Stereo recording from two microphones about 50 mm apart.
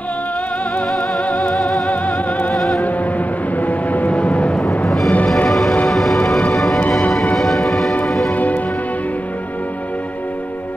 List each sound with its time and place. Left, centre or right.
0.9 s music: left
1.5 s music: centre
1.9 s music: left
2.5 s music: centre
2.8 s music: left
4.8 s music: centre
8.3 s music: left